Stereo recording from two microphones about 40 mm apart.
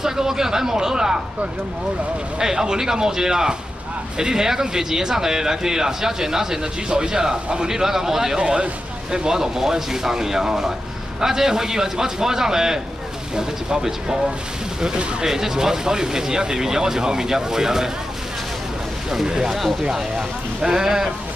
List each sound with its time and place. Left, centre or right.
0.0 s speech: centre
2.3 s speech: centre
8.4 s speech: right
19.0 s speech: centre